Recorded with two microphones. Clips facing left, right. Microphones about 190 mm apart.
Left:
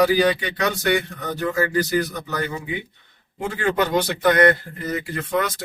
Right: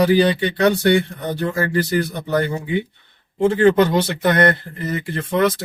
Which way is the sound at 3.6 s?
25° right (ahead or behind).